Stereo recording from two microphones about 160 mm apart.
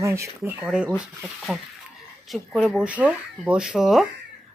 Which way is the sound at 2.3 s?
Centre (ahead or behind).